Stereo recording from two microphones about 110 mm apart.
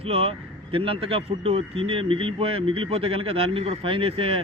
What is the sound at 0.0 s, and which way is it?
Speech, 65° right (ahead or behind).